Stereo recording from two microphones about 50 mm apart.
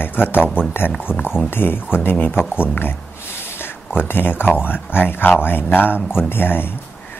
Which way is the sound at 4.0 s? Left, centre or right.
Left.